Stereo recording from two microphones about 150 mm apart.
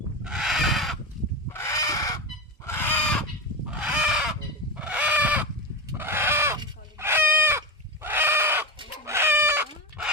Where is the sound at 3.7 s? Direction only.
10° right (ahead or behind).